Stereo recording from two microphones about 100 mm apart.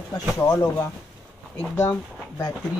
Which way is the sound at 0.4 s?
25° left (ahead or behind).